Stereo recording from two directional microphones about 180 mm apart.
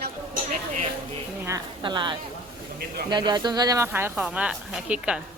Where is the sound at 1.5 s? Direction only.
20° right (ahead or behind).